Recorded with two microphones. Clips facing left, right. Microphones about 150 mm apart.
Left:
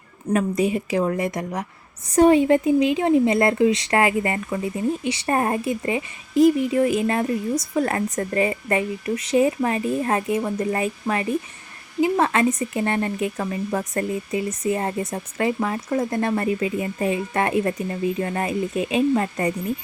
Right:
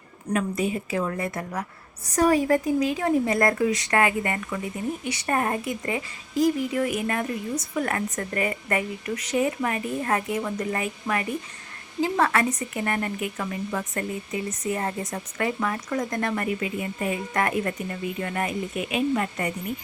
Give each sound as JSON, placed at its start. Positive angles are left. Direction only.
{"t": 0.5, "sound": "speech", "side_deg": 20}
{"t": 2.0, "sound": "speech", "side_deg": 30}
{"t": 14.7, "sound": "speech", "side_deg": 25}